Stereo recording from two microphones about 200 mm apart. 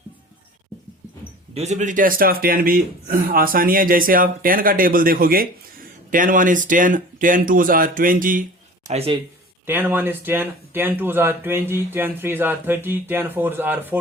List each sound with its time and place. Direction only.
1.5 s speech: 35° right (ahead or behind)
8.9 s speech: 30° right (ahead or behind)
9.6 s speech: 10° right (ahead or behind)